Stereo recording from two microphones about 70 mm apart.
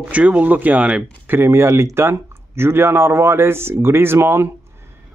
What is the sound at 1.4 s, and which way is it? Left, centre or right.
Speech, right.